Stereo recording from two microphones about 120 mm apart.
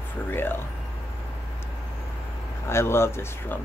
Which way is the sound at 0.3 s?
20° left (ahead or behind).